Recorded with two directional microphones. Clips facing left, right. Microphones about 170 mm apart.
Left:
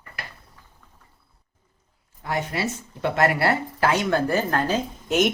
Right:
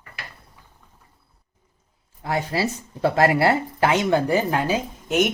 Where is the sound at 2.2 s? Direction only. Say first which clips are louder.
Right 3 dB; 30° right (ahead or behind); by 5.3 s centre (ahead or behind).